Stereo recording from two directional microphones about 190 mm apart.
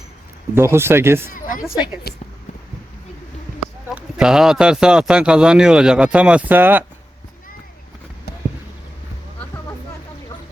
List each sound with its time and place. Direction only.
0.5 s speech: 15° right (ahead or behind)
1.3 s a woman's voice: 45° left (ahead or behind)
3.9 s speech: 5° right (ahead or behind)